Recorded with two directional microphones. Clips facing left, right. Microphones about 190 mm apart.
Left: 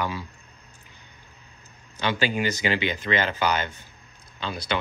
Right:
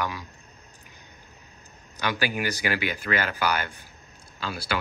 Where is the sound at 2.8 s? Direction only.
10° right (ahead or behind).